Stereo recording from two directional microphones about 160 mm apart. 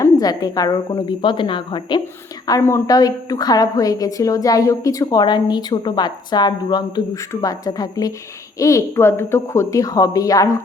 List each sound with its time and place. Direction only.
0.0 s a woman's voice: 25° left (ahead or behind)
2.5 s a woman's voice: 15° left (ahead or behind)